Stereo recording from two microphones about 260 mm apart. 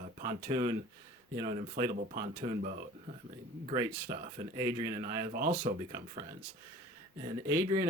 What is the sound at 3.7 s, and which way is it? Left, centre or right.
Speech, centre.